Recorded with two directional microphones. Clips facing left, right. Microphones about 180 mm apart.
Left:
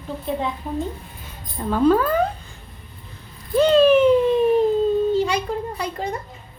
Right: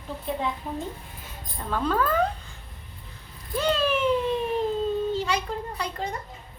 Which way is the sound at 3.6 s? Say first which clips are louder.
Left 11 dB; 20° left (ahead or behind).